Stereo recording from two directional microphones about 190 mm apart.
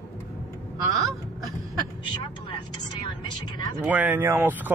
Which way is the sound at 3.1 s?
25° left (ahead or behind).